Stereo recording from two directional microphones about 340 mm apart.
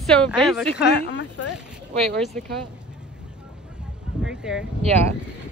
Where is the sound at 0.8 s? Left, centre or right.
Left.